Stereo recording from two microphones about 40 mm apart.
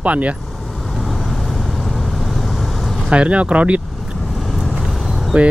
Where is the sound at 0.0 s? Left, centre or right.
Right.